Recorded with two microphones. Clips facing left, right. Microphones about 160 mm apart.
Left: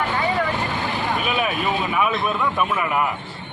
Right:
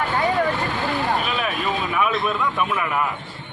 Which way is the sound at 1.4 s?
5° left (ahead or behind).